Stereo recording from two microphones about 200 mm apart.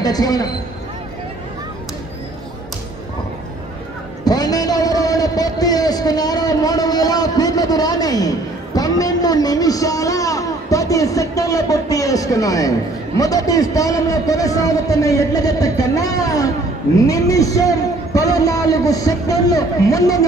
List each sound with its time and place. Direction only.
0.0 s speech: 20° left (ahead or behind)
4.2 s a sound: 20° left (ahead or behind)
13.2 s a man's voice: 15° left (ahead or behind)